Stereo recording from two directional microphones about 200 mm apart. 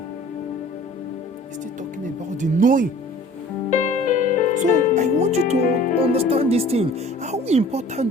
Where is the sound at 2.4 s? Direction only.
40° right (ahead or behind).